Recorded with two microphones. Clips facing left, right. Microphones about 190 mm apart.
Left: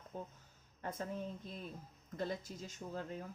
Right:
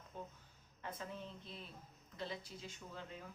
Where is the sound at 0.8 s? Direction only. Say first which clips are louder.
Left 6 dB; 45° left (ahead or behind).